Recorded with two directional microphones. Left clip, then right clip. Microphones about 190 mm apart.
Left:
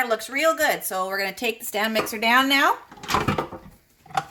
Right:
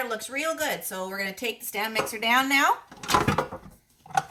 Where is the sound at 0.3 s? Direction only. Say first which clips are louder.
Left 8 dB; 50° left (ahead or behind).